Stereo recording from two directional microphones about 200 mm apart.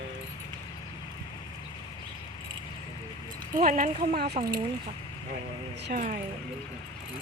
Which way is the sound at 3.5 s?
40° right (ahead or behind).